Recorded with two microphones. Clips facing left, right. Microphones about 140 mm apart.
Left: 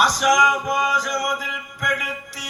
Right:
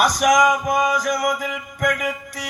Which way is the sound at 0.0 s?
50° right (ahead or behind).